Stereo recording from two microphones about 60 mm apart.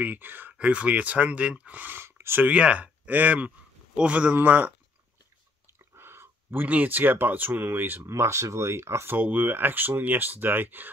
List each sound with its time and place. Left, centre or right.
0.0 s speech: right
0.6 s speech: right
1.8 s a sound: right
2.4 s speech: right
5.9 s a sound: right
6.6 s speech: right
8.1 s speech: right
9.1 s speech: right